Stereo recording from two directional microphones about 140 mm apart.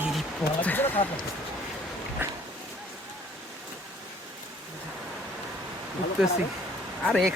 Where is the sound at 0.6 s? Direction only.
10° left (ahead or behind).